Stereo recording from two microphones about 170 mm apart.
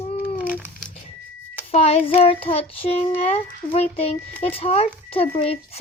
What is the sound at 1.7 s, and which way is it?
Speech, 35° left (ahead or behind).